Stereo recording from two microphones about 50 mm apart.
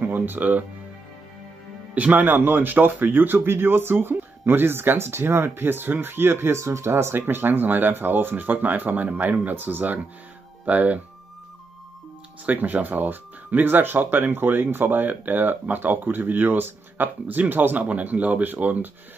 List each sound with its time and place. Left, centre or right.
0.0 s speech: right
2.0 s speech: right
2.2 s speech: right
7.2 s speech: right
12.4 s speech: right